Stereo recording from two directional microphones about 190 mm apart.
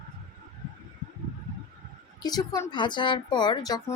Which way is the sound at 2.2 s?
20° left (ahead or behind).